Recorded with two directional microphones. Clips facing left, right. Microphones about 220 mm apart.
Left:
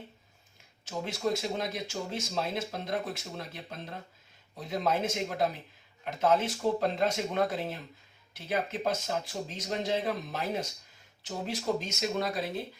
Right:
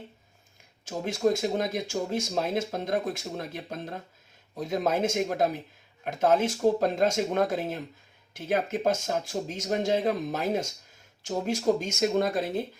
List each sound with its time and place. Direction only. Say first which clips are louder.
0.9 s speech: right 6 dB; 45° right (ahead or behind)